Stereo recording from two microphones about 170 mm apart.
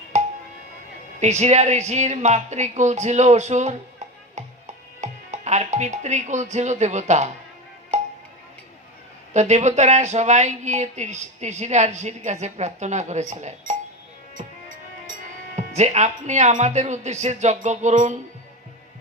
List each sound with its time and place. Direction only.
0.1 s a sound: 40° right (ahead or behind)
1.2 s speech: 40° right (ahead or behind)
4.4 s music: 40° right (ahead or behind)
9.3 s speech: 45° right (ahead or behind)
14.4 s music: 45° right (ahead or behind)
15.5 s speech: 40° right (ahead or behind)